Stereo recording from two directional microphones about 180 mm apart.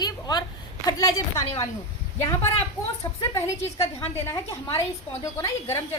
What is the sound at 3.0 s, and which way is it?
A woman's voice, 15° left (ahead or behind).